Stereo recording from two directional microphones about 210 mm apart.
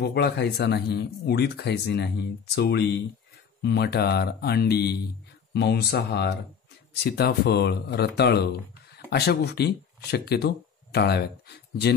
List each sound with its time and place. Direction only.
0.0 s speech: 55° left (ahead or behind)